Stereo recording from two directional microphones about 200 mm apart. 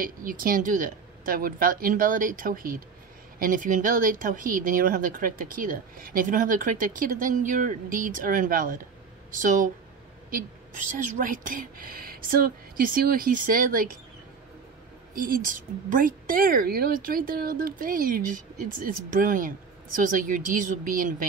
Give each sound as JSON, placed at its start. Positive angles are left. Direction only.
{"t": 0.0, "sound": "speech", "side_deg": -45}
{"t": 11.1, "sound": "speech", "side_deg": -40}
{"t": 15.1, "sound": "speech", "side_deg": -45}